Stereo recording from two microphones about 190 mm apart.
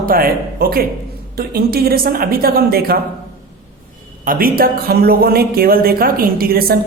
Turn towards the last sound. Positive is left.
turn(degrees=-55)  # may be behind; listen again after turning